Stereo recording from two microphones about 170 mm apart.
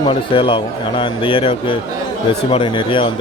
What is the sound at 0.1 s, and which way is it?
A man's voice, 30° left (ahead or behind).